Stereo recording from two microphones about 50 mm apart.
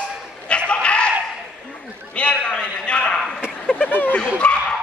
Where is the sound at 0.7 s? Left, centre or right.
Left.